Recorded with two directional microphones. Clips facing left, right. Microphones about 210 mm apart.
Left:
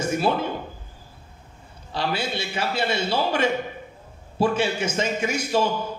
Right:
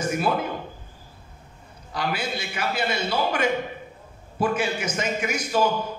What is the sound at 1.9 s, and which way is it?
A man's voice, 30° left (ahead or behind).